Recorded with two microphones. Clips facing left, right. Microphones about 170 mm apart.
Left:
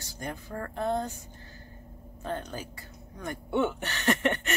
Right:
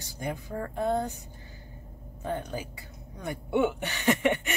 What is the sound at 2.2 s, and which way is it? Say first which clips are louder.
Speech: right 2 dB; 15° right (ahead or behind).